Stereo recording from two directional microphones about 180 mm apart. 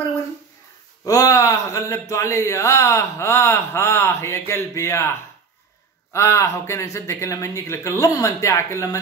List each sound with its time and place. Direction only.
1.0 s speech: 20° left (ahead or behind)
6.1 s speech: 15° left (ahead or behind)